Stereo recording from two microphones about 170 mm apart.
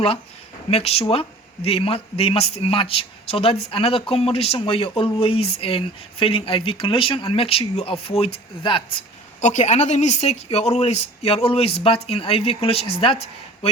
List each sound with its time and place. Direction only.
0.7 s speech: 35° left (ahead or behind)
9.4 s speech: 45° left (ahead or behind)